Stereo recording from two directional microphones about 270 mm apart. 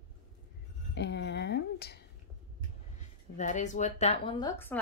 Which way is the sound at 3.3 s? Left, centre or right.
Left.